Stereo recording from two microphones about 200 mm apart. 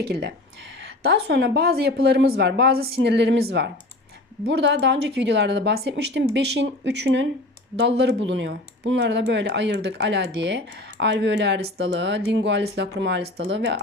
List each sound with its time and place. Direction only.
0.0 s speech: 55° right (ahead or behind)